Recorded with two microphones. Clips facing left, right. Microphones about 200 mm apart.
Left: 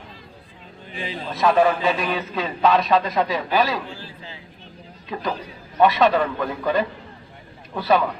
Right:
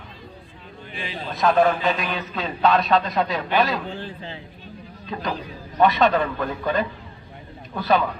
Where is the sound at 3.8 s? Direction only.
35° right (ahead or behind).